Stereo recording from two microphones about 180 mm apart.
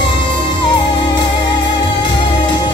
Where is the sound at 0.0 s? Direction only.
25° left (ahead or behind).